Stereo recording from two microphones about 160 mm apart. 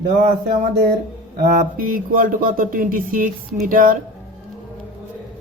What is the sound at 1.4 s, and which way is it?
Speech, 60° right (ahead or behind).